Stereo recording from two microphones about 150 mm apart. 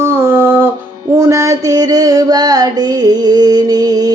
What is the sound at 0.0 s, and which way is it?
Music, 15° right (ahead or behind).